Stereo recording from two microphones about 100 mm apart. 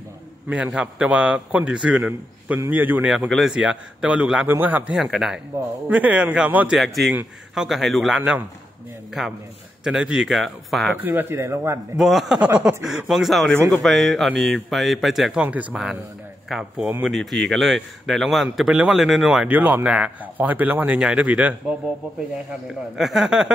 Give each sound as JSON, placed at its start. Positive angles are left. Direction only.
{"t": 0.7, "sound": "a man's voice", "side_deg": -10}
{"t": 3.3, "sound": "a man's voice", "side_deg": 0}
{"t": 4.9, "sound": "speech", "side_deg": -5}
{"t": 5.9, "sound": "a man's voice", "side_deg": -15}
{"t": 6.8, "sound": "speech", "side_deg": 0}
{"t": 8.2, "sound": "speech", "side_deg": -20}
{"t": 9.2, "sound": "speech", "side_deg": -5}
{"t": 11.0, "sound": "speech", "side_deg": -20}
{"t": 12.0, "sound": "speech", "side_deg": -5}
{"t": 15.4, "sound": "a man's voice", "side_deg": -15}
{"t": 19.5, "sound": "a man's voice", "side_deg": -20}
{"t": 22.9, "sound": "a man's voice", "side_deg": -5}